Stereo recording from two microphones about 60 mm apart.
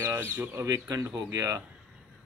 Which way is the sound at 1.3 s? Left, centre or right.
Right.